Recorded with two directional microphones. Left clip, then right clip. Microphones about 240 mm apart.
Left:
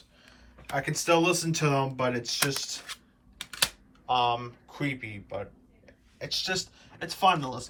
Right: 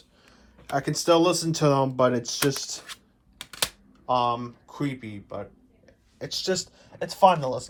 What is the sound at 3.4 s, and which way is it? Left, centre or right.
Camera, right.